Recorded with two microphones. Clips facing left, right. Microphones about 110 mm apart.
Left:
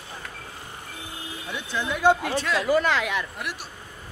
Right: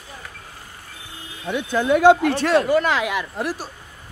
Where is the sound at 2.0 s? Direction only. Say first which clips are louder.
Right 6 dB; 80° right.